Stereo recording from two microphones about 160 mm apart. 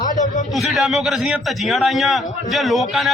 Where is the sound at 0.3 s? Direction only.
50° left (ahead or behind).